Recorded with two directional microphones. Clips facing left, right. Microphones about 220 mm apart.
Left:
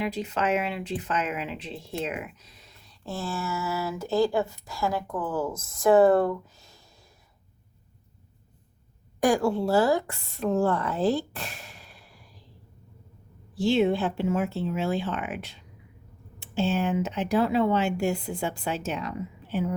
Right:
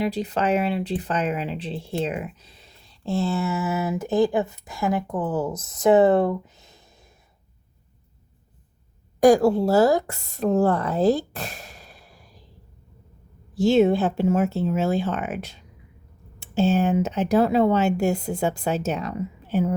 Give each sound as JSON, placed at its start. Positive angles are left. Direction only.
{"t": 0.0, "sound": "speech", "side_deg": -35}
{"t": 9.2, "sound": "a woman's voice", "side_deg": -40}
{"t": 13.6, "sound": "speech", "side_deg": -45}